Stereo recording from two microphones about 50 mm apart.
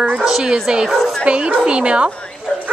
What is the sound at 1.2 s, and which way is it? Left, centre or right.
Speech, right.